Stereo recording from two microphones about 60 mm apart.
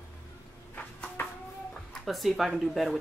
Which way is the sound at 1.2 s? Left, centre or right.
Left.